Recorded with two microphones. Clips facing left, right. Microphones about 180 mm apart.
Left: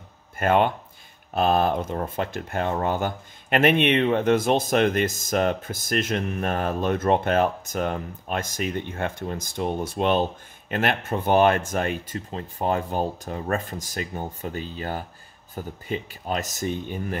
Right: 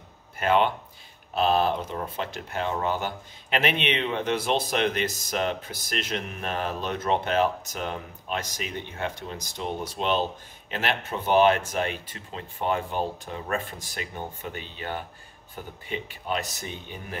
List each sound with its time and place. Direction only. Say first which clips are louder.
0.4 s speech: left 2 dB; 50° left (ahead or behind)